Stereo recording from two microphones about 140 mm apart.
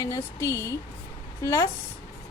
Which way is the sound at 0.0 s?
20° left (ahead or behind).